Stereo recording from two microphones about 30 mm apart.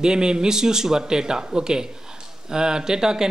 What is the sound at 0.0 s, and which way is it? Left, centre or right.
A man's voice, right.